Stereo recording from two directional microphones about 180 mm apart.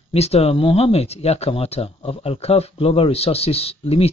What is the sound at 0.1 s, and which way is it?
Speech, 35° left (ahead or behind).